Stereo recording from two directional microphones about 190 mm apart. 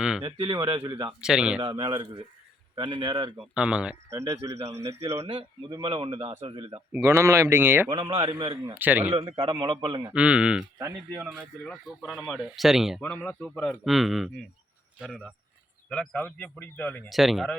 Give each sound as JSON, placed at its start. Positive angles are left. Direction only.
{"t": 0.2, "sound": "speech", "side_deg": -25}
{"t": 1.2, "sound": "speech", "side_deg": -5}
{"t": 1.6, "sound": "speech", "side_deg": -25}
{"t": 3.5, "sound": "a man's voice", "side_deg": -5}
{"t": 4.9, "sound": "speech", "side_deg": -30}
{"t": 6.9, "sound": "a man's voice", "side_deg": -15}
{"t": 7.9, "sound": "speech", "side_deg": -30}
{"t": 8.7, "sound": "a man's voice", "side_deg": -10}
{"t": 9.1, "sound": "speech", "side_deg": -25}
{"t": 10.0, "sound": "a man's voice", "side_deg": -5}
{"t": 11.6, "sound": "speech", "side_deg": 5}
{"t": 17.1, "sound": "speech", "side_deg": 0}